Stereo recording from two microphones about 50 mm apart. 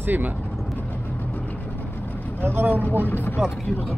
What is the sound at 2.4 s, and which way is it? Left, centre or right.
Speech, right.